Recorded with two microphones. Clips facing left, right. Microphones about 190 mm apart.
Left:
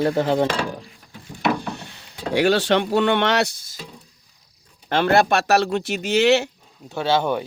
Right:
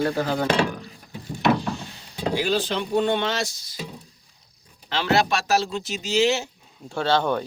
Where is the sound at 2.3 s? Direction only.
75° left (ahead or behind); by 3.8 s 55° left (ahead or behind).